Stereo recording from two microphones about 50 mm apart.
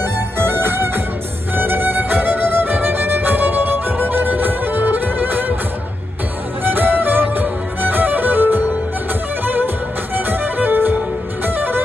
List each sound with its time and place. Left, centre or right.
0.0 s music: right
6.6 s music: right